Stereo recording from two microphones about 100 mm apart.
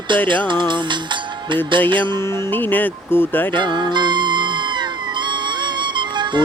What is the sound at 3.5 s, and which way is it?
Music, 50° right (ahead or behind).